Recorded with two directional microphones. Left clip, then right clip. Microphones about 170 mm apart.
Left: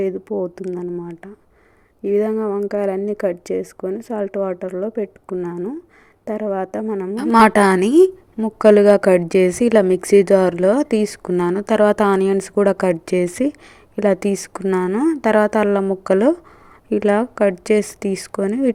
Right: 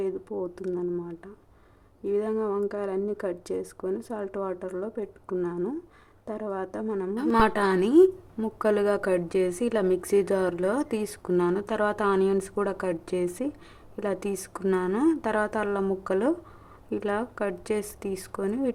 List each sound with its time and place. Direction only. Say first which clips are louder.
0.0 s speech: left 9 dB; 30° left (ahead or behind)